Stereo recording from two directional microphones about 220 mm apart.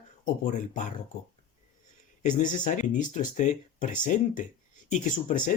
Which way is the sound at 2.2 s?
35° left (ahead or behind).